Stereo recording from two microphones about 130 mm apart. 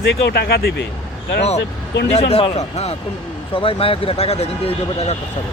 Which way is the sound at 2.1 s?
50° left (ahead or behind).